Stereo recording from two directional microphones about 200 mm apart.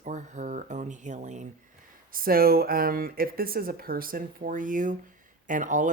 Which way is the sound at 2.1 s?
45° right (ahead or behind).